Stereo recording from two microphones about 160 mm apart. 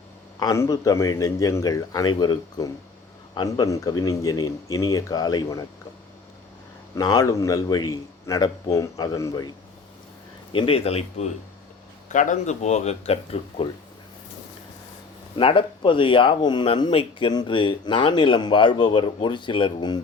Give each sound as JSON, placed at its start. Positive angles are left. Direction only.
{"t": 0.3, "sound": "a man's voice", "side_deg": 20}
{"t": 6.9, "sound": "a man's voice", "side_deg": 20}
{"t": 10.5, "sound": "speech", "side_deg": 35}
{"t": 12.0, "sound": "speech", "side_deg": 50}
{"t": 15.4, "sound": "speech", "side_deg": 35}